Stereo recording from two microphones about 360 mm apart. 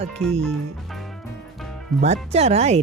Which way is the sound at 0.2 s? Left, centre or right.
Centre.